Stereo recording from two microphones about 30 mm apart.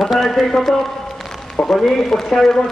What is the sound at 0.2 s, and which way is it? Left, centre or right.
Speech, centre.